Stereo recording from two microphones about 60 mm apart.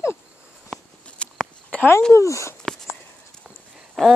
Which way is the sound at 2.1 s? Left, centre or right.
Left.